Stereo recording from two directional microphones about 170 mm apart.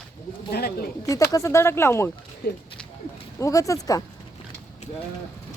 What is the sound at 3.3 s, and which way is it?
Speech, 20° left (ahead or behind).